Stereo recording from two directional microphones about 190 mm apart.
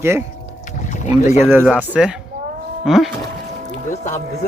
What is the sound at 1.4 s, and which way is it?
Speech, 10° right (ahead or behind).